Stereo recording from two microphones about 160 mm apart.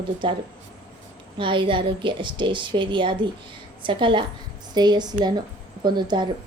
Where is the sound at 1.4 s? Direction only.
30° right (ahead or behind).